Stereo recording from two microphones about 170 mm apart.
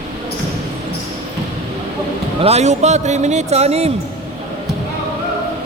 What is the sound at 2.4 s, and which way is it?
A man's voice, 40° right (ahead or behind).